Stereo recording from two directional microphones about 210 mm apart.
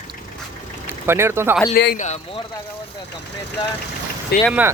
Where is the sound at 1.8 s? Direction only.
50° left (ahead or behind).